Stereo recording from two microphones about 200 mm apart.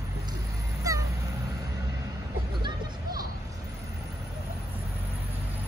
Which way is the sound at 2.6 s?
20° right (ahead or behind).